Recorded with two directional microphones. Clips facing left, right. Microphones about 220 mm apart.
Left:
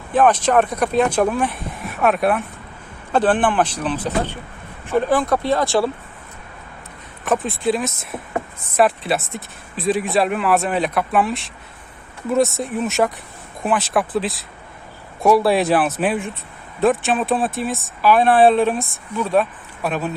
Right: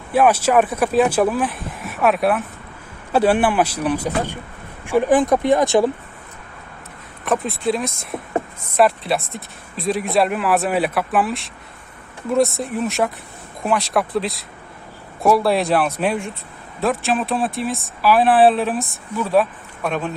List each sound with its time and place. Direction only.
0.1 s speech: 10° right (ahead or behind)
7.3 s speech: centre (ahead or behind)
8.1 s speech: 25° right (ahead or behind)
8.7 s speech: centre (ahead or behind)